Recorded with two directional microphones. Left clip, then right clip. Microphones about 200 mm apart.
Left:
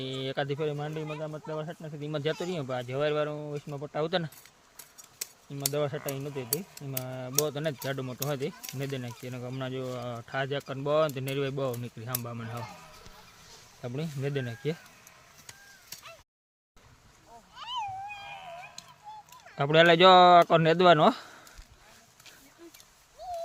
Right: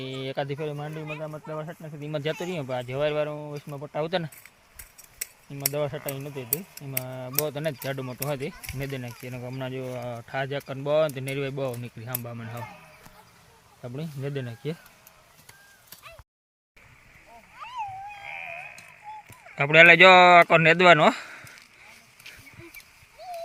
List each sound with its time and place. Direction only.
0.0 s speech: 10° right (ahead or behind)
5.7 s speech: 10° right (ahead or behind)
13.8 s speech: 15° left (ahead or behind)
17.6 s a sound: 25° right (ahead or behind)
19.5 s speech: 5° left (ahead or behind)